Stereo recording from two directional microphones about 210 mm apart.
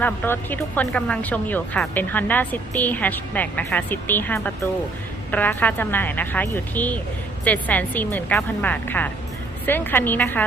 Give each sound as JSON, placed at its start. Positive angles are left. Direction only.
{"t": 0.0, "sound": "speech", "side_deg": 10}